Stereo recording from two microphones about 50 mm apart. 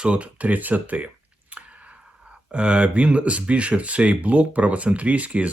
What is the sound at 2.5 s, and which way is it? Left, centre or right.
Speech, right.